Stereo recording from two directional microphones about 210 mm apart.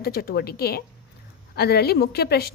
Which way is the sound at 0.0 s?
45° left (ahead or behind).